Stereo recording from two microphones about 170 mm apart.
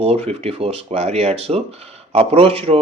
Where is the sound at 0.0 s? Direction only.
35° right (ahead or behind).